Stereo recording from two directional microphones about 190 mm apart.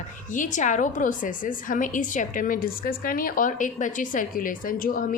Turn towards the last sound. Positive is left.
turn(degrees=45)  # may be behind; listen again after turning